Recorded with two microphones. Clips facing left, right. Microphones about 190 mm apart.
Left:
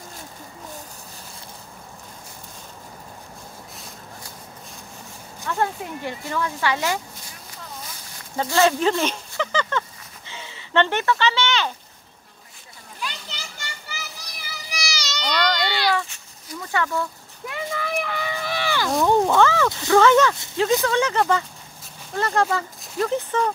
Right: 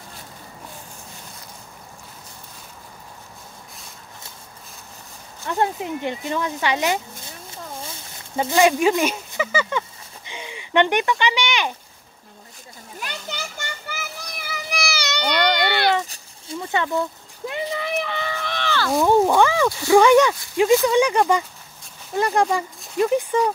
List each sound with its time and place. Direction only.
5.5 s speech: 20° right (ahead or behind)
8.4 s speech: 15° right (ahead or behind)
13.0 s children playing: 50° right (ahead or behind)
16.1 s a sound: 25° right (ahead or behind)
18.0 s run: 5° left (ahead or behind)
19.0 s speech: 15° right (ahead or behind)